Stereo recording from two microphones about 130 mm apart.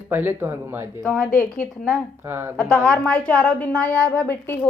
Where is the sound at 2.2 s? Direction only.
15° right (ahead or behind).